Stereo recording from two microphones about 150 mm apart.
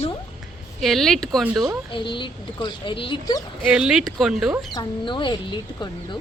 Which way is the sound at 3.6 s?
5° right (ahead or behind).